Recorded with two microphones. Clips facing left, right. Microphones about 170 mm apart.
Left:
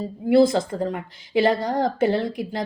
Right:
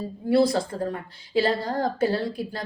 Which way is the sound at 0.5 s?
20° left (ahead or behind).